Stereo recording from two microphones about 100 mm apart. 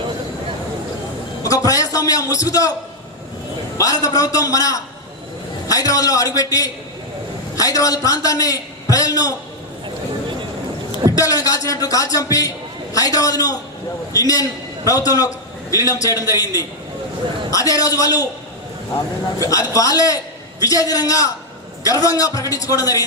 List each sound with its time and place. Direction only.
1.5 s a man's voice: 35° left (ahead or behind)
3.8 s a man's voice: 35° left (ahead or behind)
11.1 s a man's voice: 35° left (ahead or behind)
19.4 s a man's voice: 35° left (ahead or behind)